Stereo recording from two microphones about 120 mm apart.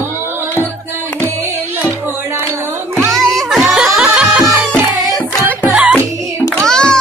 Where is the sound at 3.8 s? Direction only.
10° right (ahead or behind).